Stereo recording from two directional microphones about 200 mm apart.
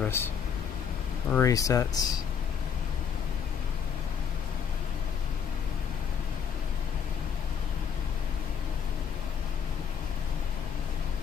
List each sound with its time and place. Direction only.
0.0 s air conditioning: 10° left (ahead or behind)
1.3 s speech: 15° left (ahead or behind)